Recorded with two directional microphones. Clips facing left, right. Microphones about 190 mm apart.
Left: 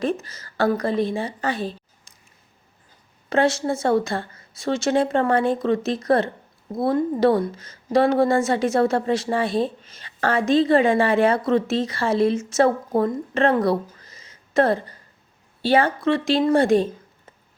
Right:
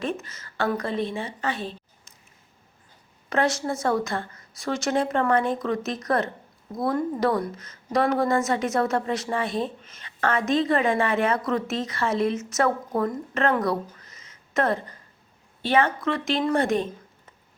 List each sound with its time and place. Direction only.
0.0 s a woman's voice: 35° left (ahead or behind)
3.2 s a woman's voice: 30° left (ahead or behind)